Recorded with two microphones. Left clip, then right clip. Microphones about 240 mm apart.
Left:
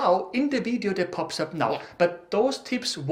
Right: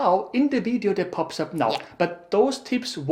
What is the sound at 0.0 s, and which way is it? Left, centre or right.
Speech, left.